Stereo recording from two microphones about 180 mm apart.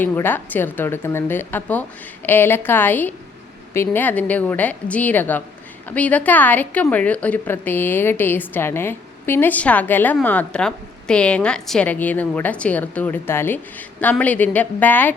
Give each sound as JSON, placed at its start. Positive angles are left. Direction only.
{"t": 0.0, "sound": "a woman's voice", "side_deg": 10}